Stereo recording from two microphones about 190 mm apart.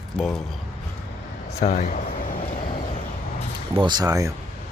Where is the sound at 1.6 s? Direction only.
40° left (ahead or behind).